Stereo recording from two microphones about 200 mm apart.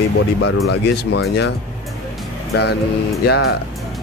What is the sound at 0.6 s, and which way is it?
Speech, 55° left (ahead or behind).